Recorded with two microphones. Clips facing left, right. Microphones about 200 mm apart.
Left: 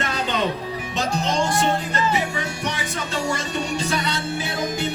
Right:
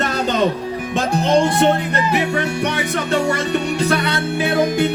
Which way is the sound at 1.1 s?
55° right (ahead or behind).